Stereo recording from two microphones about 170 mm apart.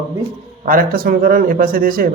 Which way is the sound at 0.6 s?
55° right (ahead or behind).